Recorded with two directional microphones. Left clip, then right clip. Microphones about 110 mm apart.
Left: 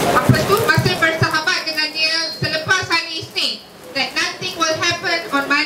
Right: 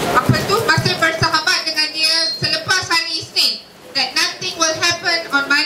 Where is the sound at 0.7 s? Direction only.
40° right (ahead or behind).